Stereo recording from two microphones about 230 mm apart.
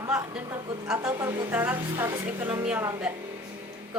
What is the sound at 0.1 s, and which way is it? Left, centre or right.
A woman's voice, centre.